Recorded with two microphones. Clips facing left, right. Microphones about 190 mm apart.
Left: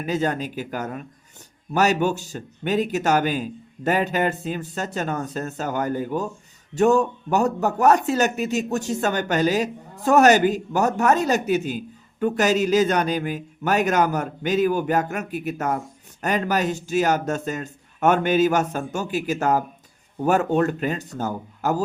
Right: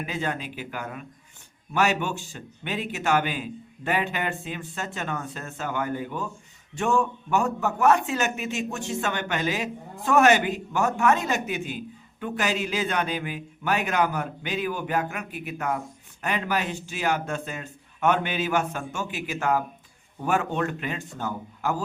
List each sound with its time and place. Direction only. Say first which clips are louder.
0.0 s a man's voice: left 6 dB; 40° left (ahead or behind)